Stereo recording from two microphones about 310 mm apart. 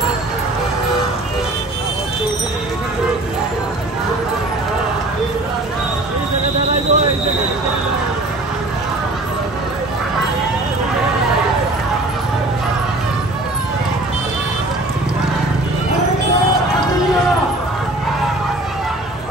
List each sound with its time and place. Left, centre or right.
6.9 s train: right